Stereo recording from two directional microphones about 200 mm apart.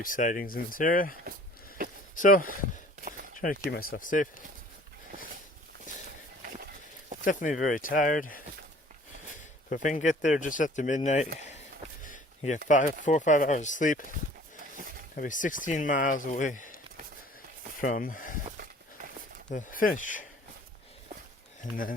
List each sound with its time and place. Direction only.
0.0 s speech: 40° left (ahead or behind)
2.1 s speech: 40° left (ahead or behind)
7.3 s speech: 40° left (ahead or behind)
9.6 s speech: 40° left (ahead or behind)
12.0 s a sound: 40° left (ahead or behind)
12.6 s speech: 40° left (ahead or behind)
15.1 s speech: 40° left (ahead or behind)
19.5 s speech: 40° left (ahead or behind)
21.6 s speech: 45° left (ahead or behind)